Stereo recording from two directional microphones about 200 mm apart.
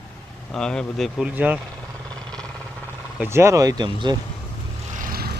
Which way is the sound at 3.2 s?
15° right (ahead or behind).